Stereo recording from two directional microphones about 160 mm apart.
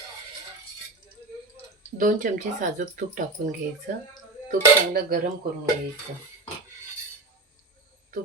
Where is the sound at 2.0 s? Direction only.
55° right (ahead or behind).